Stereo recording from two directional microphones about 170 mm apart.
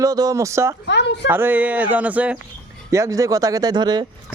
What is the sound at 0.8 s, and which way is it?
Speech, 90° left.